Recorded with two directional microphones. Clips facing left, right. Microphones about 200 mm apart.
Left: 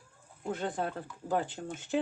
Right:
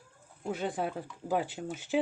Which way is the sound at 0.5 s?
10° right (ahead or behind).